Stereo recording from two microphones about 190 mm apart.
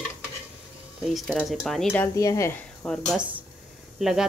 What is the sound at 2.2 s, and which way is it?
Speech, 15° left (ahead or behind).